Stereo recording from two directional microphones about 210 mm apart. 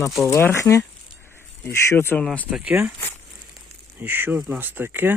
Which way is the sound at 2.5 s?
5° right (ahead or behind).